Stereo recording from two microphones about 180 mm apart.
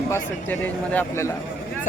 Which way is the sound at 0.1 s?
10° left (ahead or behind).